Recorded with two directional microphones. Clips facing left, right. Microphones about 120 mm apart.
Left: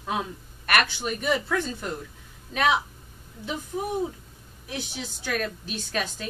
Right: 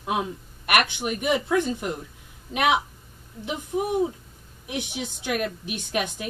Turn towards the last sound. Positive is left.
turn(degrees=-15)  # may be behind; listen again after turning